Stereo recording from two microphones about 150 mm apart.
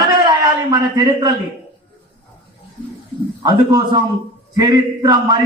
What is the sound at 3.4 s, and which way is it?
A man's voice, 25° right (ahead or behind).